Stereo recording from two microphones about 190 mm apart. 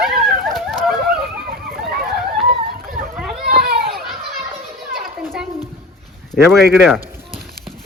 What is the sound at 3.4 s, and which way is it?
Children playing, 55° right (ahead or behind).